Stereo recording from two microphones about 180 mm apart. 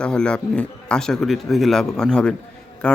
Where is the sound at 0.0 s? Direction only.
5° left (ahead or behind).